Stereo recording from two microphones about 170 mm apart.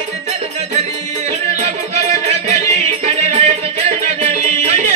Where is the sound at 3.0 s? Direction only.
40° right (ahead or behind).